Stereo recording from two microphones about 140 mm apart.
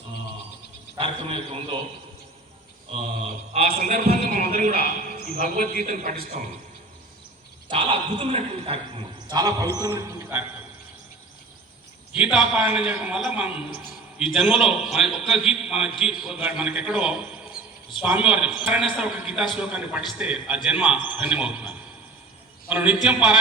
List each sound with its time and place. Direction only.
0.9 s a man's voice: 40° right (ahead or behind)
2.9 s mantra: 55° right (ahead or behind)
3.7 s a man's voice: 85° right; by 6.5 s 70° right (ahead or behind)
7.7 s a man's voice: 40° right (ahead or behind); by 10.4 s 20° right (ahead or behind)
12.1 s a man's voice: 5° right (ahead or behind)